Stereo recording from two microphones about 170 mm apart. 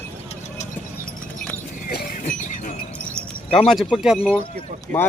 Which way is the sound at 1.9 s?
60° left (ahead or behind).